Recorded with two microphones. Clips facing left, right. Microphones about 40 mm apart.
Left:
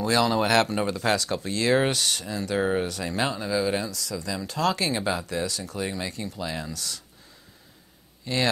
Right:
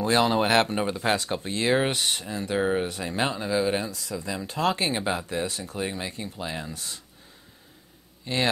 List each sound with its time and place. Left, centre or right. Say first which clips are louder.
0.0 s speech: right 1 dB; right
8.3 s speech: left 1 dB; right